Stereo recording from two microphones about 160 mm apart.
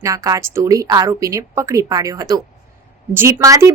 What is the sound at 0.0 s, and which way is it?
A woman's voice, 20° right (ahead or behind).